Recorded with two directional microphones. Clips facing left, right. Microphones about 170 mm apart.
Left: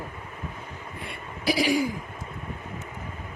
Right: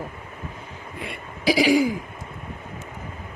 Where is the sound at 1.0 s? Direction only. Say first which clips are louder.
Right 5 dB; 90° right.